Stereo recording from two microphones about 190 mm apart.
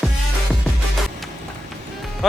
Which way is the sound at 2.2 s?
Centre (ahead or behind).